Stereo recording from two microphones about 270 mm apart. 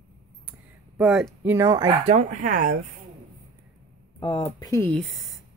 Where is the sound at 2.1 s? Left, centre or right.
Right.